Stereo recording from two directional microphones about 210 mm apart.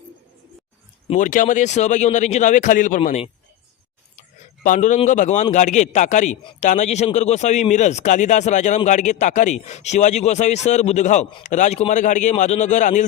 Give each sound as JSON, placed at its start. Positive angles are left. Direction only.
{"t": 1.1, "sound": "speech", "side_deg": 40}
{"t": 4.6, "sound": "speech", "side_deg": 40}